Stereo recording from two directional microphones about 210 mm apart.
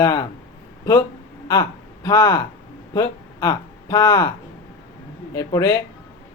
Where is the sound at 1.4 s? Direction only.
15° left (ahead or behind).